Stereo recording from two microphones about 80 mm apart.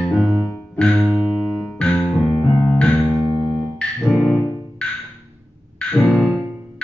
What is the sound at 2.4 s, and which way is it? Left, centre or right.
Electric piano, centre.